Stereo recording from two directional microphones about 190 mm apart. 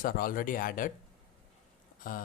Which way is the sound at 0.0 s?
50° left (ahead or behind).